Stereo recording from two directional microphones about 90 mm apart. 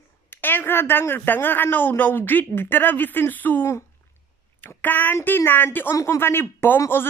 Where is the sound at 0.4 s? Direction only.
20° left (ahead or behind).